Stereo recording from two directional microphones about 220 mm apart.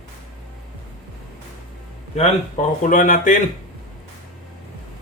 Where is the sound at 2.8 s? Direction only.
35° left (ahead or behind).